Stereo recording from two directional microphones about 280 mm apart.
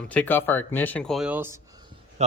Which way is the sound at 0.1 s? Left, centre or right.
Centre.